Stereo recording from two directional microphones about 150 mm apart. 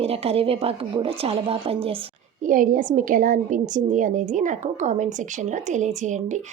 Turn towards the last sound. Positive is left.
turn(degrees=-55)  # may be behind; listen again after turning